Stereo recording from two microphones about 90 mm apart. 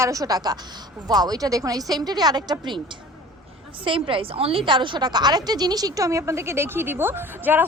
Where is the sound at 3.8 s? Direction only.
75° right (ahead or behind).